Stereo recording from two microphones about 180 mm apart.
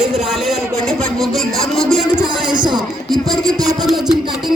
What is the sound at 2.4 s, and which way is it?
Speech, 25° right (ahead or behind).